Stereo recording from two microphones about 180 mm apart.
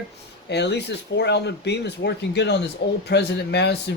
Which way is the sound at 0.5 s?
70° left (ahead or behind).